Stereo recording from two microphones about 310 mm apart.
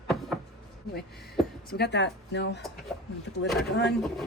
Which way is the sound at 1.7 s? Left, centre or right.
Left.